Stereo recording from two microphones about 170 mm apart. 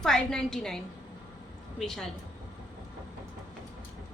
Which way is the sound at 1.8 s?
Centre (ahead or behind).